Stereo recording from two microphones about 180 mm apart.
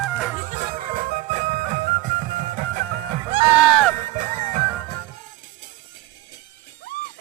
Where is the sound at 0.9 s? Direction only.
45° right (ahead or behind).